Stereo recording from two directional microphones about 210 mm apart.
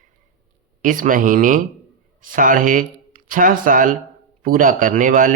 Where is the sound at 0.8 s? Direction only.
40° right (ahead or behind).